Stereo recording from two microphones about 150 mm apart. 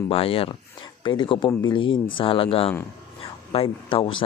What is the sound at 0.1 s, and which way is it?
Speech, 40° left (ahead or behind).